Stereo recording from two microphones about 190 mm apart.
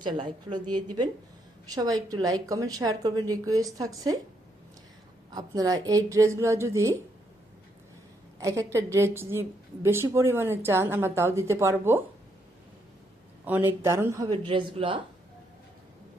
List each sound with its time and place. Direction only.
0.0 s a woman's voice: 25° right (ahead or behind)
5.3 s a woman's voice: 20° right (ahead or behind)
8.4 s a woman's voice: 15° right (ahead or behind)
13.4 s a woman's voice: 10° right (ahead or behind); by 15.0 s 25° right (ahead or behind)